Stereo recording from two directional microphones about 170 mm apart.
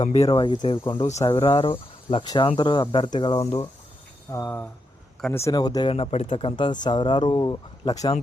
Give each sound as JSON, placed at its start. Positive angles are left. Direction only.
{"t": 0.0, "sound": "speech", "side_deg": 40}
{"t": 0.3, "sound": "speech", "side_deg": 25}
{"t": 4.3, "sound": "speech", "side_deg": 15}